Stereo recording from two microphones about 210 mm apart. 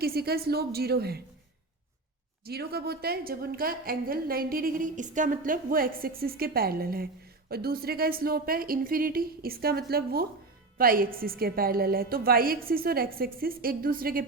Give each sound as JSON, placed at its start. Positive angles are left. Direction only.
{"t": 0.0, "sound": "a woman's voice", "side_deg": -45}
{"t": 2.5, "sound": "a woman's voice", "side_deg": -50}